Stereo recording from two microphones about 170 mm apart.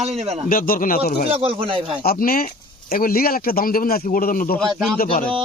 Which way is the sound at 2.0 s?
60° left (ahead or behind).